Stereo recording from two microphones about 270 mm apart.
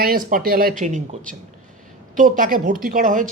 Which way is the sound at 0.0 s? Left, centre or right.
Right.